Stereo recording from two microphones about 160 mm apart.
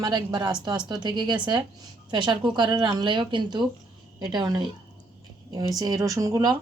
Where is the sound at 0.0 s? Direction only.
30° right (ahead or behind).